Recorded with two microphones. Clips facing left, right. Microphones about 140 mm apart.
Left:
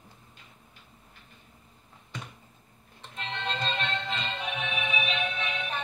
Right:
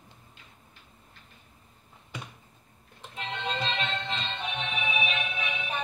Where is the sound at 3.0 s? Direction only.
5° right (ahead or behind).